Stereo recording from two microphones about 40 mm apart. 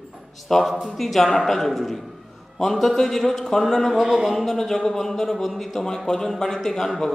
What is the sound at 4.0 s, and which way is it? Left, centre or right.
Speech, centre.